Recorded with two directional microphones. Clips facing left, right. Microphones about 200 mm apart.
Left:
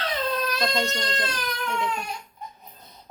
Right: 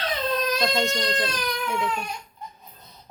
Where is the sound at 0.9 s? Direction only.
15° right (ahead or behind).